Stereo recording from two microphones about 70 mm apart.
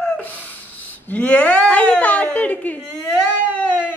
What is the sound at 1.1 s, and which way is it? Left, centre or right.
A woman's voice, centre.